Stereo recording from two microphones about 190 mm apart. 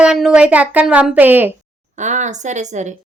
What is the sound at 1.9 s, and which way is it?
Speech, 40° right (ahead or behind).